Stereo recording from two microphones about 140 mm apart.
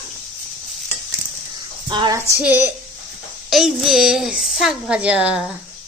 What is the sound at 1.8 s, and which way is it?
Speech, 35° right (ahead or behind).